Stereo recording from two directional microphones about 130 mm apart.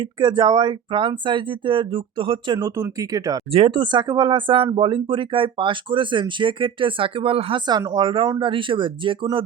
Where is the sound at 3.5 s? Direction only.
45° right (ahead or behind).